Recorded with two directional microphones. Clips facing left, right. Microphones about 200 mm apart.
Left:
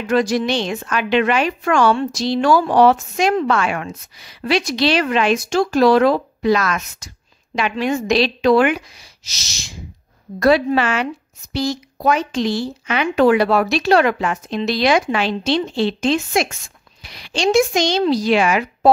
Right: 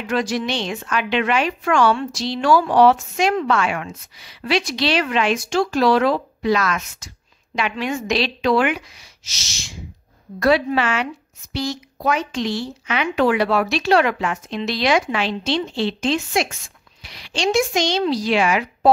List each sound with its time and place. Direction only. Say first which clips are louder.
0.1 s a woman's voice: left 5 dB; 40° left (ahead or behind)